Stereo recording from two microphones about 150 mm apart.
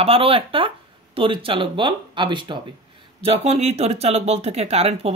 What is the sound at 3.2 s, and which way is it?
Speech, 45° right (ahead or behind).